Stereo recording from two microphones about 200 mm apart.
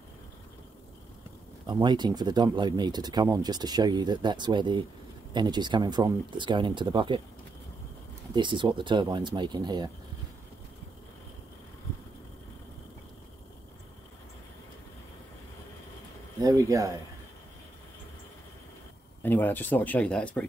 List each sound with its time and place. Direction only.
1.7 s speech: 20° right (ahead or behind)
8.4 s speech: 25° right (ahead or behind)
16.3 s speech: 20° right (ahead or behind)
19.2 s speech: 10° left (ahead or behind)